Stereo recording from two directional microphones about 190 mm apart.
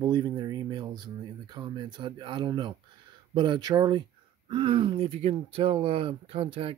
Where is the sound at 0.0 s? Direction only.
20° right (ahead or behind).